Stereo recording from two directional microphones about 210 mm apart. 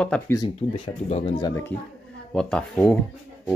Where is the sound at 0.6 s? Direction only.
35° left (ahead or behind).